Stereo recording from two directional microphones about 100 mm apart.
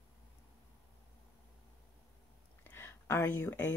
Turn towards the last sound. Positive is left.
turn(degrees=20)  # may be behind; listen again after turning